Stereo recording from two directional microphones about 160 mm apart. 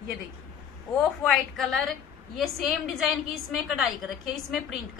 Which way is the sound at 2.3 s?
Centre (ahead or behind).